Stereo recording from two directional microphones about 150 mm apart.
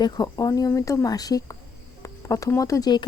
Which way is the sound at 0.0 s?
25° left (ahead or behind).